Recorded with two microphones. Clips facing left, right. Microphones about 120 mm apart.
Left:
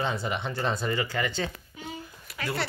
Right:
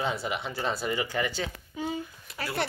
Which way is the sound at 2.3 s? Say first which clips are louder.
Even; 25° right (ahead or behind).